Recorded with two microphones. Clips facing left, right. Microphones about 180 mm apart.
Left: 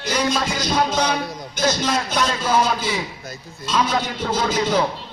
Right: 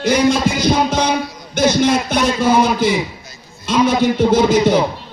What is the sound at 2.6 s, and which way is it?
Music, 60° right (ahead or behind).